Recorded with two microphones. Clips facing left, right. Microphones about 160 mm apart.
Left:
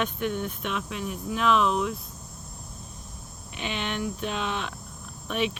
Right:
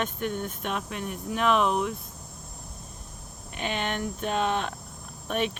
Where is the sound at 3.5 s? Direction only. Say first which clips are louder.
Right 1 dB; 45° right (ahead or behind).